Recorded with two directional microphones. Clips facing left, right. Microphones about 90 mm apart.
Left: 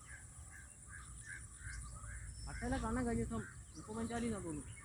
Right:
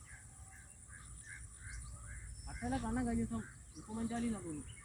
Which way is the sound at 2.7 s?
10° left (ahead or behind).